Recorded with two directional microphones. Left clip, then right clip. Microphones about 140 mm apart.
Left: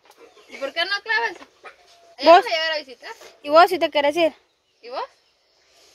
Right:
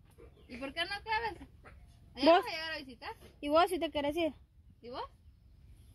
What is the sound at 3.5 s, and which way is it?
Speech, 10° left (ahead or behind).